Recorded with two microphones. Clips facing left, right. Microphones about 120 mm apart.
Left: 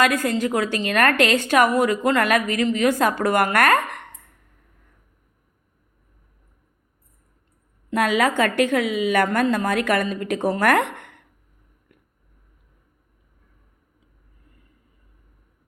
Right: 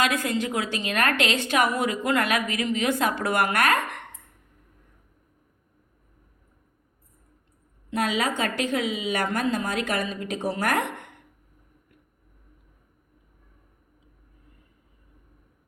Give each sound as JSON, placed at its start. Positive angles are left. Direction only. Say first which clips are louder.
{"t": 0.0, "sound": "a woman's voice", "louder": "left 5 dB", "side_deg": 45}
{"t": 7.9, "sound": "a woman's voice", "louder": "left 6 dB", "side_deg": 55}